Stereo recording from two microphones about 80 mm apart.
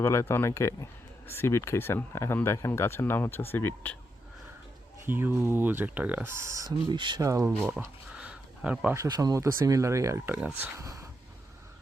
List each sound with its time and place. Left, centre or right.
0.0 s speech: left
5.0 s speech: right
6.3 s speech: right
6.7 s speech: right
7.2 s speech: right
7.8 s a sound: centre
9.0 s speech: right
9.3 s speech: right
10.2 s speech: right
10.8 s speech: right